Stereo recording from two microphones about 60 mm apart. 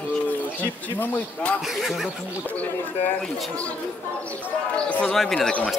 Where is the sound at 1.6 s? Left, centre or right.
Centre.